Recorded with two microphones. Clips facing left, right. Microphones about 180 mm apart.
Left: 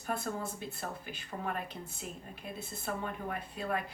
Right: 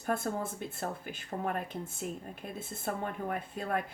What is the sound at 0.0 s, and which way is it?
Speech, 50° right (ahead or behind).